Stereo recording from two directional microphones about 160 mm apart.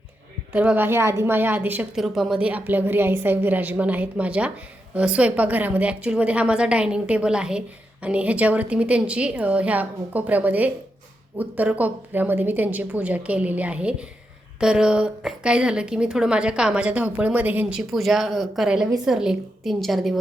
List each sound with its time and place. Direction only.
0.5 s a woman's voice: 10° right (ahead or behind)